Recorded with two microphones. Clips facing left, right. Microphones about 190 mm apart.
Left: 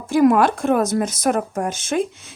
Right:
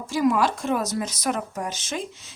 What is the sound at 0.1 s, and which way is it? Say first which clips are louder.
A woman's voice: left 7 dB; 55° left (ahead or behind).